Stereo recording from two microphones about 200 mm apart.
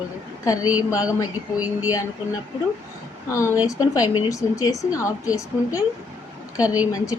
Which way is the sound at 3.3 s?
15° left (ahead or behind).